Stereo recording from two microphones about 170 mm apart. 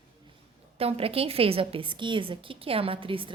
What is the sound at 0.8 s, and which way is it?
A woman's voice, 35° right (ahead or behind).